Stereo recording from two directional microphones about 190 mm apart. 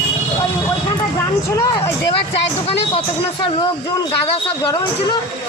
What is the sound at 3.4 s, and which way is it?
Speech, 25° left (ahead or behind).